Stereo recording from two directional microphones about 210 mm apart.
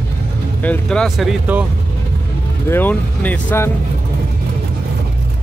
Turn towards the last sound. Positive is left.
turn(degrees=10)  # may be behind; listen again after turning